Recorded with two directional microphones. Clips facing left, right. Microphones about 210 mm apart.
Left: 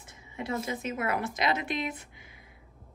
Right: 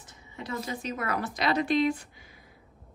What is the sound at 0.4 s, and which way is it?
A woman's voice, 25° left (ahead or behind).